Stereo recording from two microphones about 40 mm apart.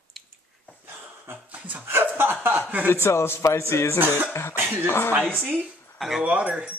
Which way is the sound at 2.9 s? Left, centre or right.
Left.